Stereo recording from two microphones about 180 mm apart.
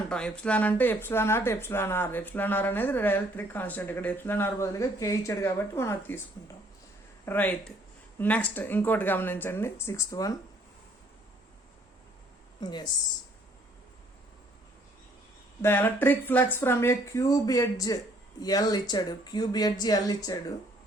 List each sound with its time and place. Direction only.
0.1 s speech: 5° left (ahead or behind)
7.3 s speech: 10° left (ahead or behind)
12.5 s speech: 25° left (ahead or behind)
15.6 s speech: 10° left (ahead or behind)